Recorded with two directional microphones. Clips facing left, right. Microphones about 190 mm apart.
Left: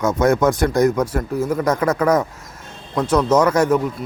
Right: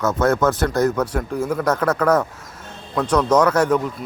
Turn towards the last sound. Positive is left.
turn(degrees=5)  # may be behind; listen again after turning